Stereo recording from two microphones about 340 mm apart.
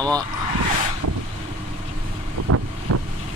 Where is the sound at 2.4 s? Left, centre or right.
Right.